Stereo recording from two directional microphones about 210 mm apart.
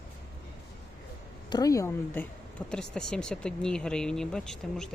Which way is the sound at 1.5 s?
15° left (ahead or behind).